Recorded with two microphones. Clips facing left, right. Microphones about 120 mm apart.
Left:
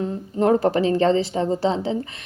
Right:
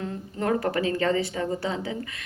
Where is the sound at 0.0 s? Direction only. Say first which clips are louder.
Left 8 dB; 25° left (ahead or behind).